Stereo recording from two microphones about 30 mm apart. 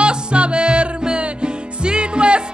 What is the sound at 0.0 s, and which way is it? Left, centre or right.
Music, right.